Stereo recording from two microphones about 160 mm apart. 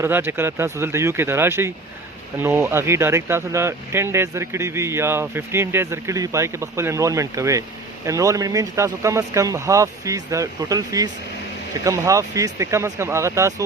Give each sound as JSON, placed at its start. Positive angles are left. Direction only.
{"t": 0.0, "sound": "speech", "side_deg": -15}